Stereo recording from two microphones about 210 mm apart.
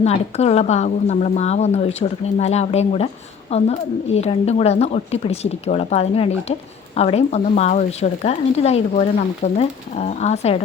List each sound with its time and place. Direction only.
0.0 s a woman's voice: 30° left (ahead or behind)